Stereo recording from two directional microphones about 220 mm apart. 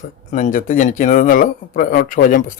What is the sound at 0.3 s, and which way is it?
Speech, 35° left (ahead or behind).